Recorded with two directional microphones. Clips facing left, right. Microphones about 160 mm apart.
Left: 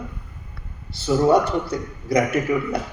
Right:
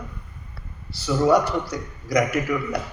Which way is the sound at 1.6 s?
25° left (ahead or behind).